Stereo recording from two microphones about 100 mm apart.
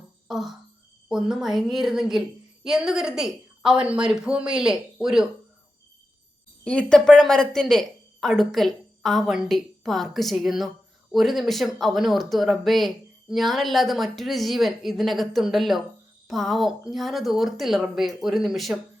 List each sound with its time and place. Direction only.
0.3 s music: centre (ahead or behind)
1.0 s speech: 5° right (ahead or behind)
6.7 s speech: 10° left (ahead or behind)